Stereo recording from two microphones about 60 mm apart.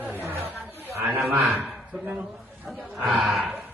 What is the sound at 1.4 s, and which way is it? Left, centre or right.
Speech, centre.